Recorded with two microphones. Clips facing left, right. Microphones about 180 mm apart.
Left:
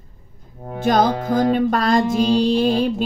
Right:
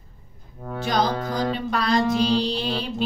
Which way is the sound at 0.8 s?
50° left (ahead or behind).